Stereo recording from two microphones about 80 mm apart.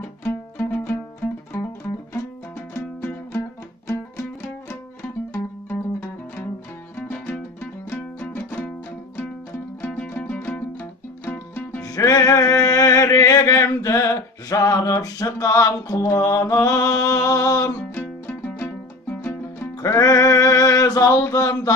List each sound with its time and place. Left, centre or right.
0.0 s music: left
2.7 s music: left
9.8 s music: centre
11.8 s music: left
13.7 s a sound: left
17.9 s music: left
19.8 s a sound: left